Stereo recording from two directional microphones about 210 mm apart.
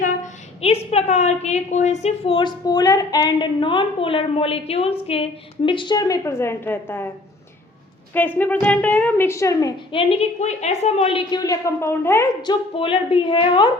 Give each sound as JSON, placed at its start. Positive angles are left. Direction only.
{"t": 0.6, "sound": "a woman's voice", "side_deg": 30}
{"t": 8.1, "sound": "a woman's voice", "side_deg": 10}